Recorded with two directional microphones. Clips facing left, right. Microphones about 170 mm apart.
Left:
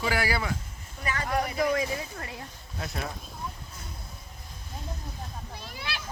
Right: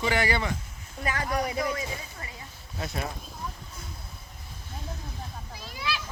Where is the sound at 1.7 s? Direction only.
60° left (ahead or behind).